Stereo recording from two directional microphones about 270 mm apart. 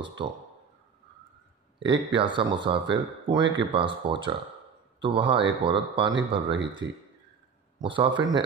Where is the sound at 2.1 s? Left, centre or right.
Centre.